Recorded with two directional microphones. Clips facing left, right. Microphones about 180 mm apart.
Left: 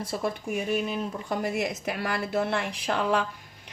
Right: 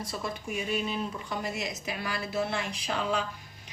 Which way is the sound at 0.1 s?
60° left (ahead or behind).